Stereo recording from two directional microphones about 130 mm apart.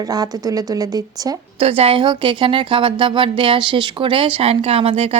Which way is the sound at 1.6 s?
45° right (ahead or behind).